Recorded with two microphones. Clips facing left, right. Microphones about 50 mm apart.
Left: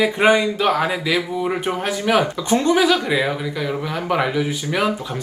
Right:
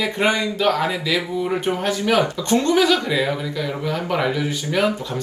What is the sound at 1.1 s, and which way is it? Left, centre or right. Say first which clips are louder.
Speech: left 1 dB; left.